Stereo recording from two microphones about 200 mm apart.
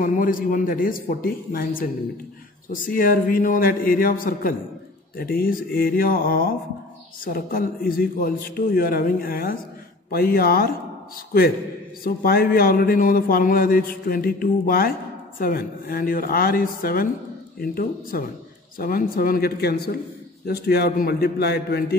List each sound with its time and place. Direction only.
0.0 s a man's voice: 45° left (ahead or behind)
2.7 s a man's voice: 45° left (ahead or behind)
12.0 s a man's voice: 45° left (ahead or behind)